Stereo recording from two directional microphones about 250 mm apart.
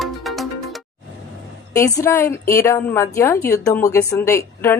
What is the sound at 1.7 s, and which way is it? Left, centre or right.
Speech, centre.